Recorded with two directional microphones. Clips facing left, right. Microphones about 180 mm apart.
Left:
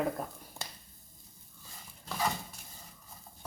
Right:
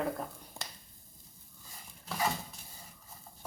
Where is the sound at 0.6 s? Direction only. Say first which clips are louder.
Left 1 dB; 15° right (ahead or behind).